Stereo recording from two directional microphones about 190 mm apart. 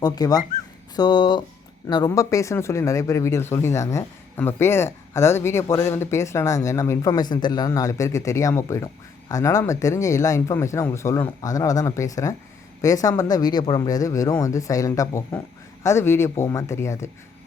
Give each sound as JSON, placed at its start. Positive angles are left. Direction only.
{"t": 0.0, "sound": "speech", "side_deg": 20}